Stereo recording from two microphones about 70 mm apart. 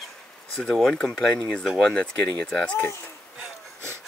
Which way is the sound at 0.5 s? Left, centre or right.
Centre.